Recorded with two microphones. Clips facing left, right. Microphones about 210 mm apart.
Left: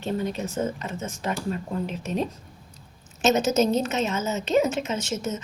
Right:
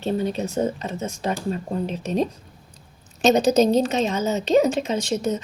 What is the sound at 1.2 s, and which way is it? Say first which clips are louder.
Speech: right 2 dB; 30° right (ahead or behind).